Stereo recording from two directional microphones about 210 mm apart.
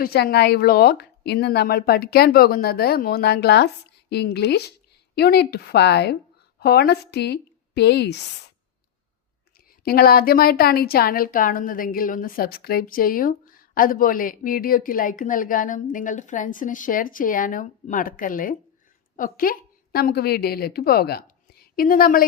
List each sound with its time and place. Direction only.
0.0 s a woman's voice: 50° left (ahead or behind)
9.8 s a woman's voice: 45° left (ahead or behind)